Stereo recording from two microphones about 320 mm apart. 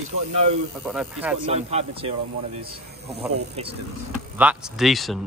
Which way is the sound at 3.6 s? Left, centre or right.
Centre.